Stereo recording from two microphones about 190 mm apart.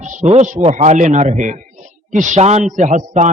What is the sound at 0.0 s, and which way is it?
A man's voice, 40° right (ahead or behind).